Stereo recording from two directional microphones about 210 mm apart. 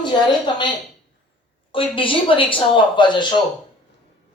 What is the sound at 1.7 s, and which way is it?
A man's voice, 25° left (ahead or behind).